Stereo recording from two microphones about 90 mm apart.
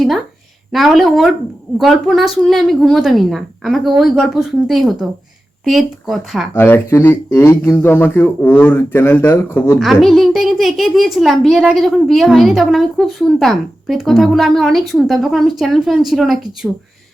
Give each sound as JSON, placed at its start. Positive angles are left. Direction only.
{"t": 0.7, "sound": "a child's voice", "side_deg": 0}
{"t": 6.5, "sound": "speech", "side_deg": 25}
{"t": 9.7, "sound": "a child's voice", "side_deg": 0}
{"t": 16.6, "sound": "speech", "side_deg": -15}